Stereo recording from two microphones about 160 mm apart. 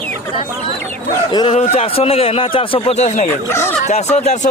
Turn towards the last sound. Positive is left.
turn(degrees=40)  # may be behind; listen again after turning